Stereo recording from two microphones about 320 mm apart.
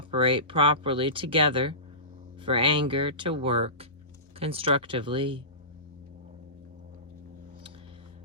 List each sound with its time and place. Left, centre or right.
0.1 s speech: centre